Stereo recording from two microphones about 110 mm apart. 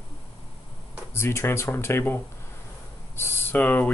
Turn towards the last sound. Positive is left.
turn(degrees=15)  # may be behind; listen again after turning